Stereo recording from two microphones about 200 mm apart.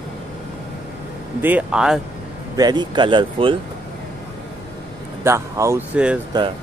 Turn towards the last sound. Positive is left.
turn(degrees=-20)  # may be behind; listen again after turning